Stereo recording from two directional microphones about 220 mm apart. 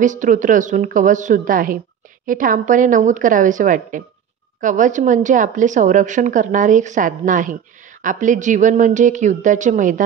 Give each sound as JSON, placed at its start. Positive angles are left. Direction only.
{"t": 0.0, "sound": "a woman's voice", "side_deg": -35}